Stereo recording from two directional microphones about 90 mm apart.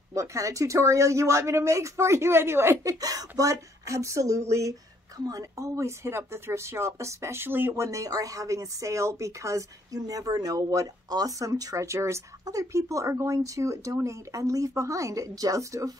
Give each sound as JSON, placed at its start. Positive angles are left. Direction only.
{"t": 0.1, "sound": "speech", "side_deg": -35}